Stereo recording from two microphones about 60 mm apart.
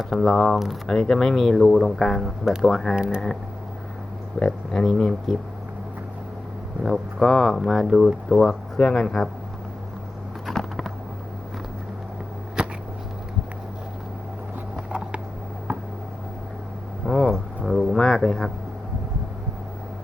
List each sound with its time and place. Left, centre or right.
0.0 s speech: centre
2.9 s speech: centre
4.4 s speech: centre
6.8 s speech: centre
8.8 s speech: centre
9.0 s speech: centre
10.4 s a sound: centre
12.6 s a sound: centre
17.1 s a sound: centre